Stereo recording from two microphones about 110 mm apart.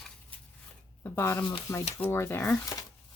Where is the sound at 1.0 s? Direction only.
25° left (ahead or behind).